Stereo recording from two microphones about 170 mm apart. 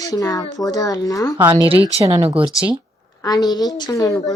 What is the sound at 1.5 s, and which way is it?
Speech, 30° right (ahead or behind).